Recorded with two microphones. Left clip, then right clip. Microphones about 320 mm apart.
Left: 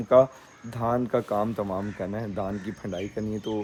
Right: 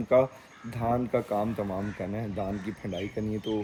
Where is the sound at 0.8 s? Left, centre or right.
Centre.